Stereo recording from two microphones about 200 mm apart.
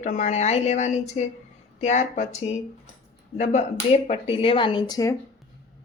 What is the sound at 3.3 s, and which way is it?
Speech, 35° left (ahead or behind).